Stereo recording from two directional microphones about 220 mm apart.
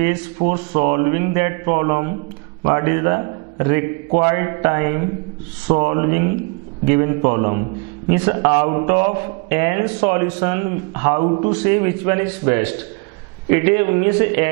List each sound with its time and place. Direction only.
0.5 s a man's voice: 15° right (ahead or behind)
11.2 s a man's voice: 30° right (ahead or behind)
11.5 s a man's voice: 15° right (ahead or behind)